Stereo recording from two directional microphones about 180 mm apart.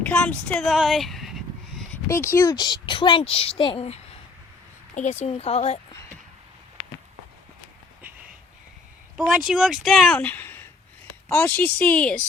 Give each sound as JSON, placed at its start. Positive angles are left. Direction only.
{"t": 0.0, "sound": "speech", "side_deg": 10}
{"t": 1.9, "sound": "speech", "side_deg": 15}
{"t": 4.9, "sound": "speech", "side_deg": 40}
{"t": 9.1, "sound": "speech", "side_deg": 0}